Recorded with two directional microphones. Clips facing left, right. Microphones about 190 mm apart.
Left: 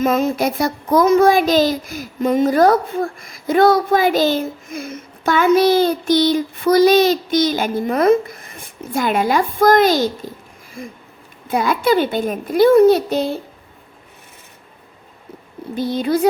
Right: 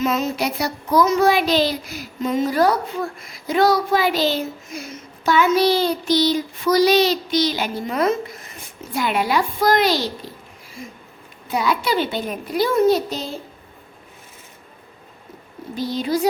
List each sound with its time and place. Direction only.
0.0 s a child's voice: 50° left (ahead or behind)
11.4 s a child's voice: 50° left (ahead or behind)
15.7 s speech: 55° left (ahead or behind)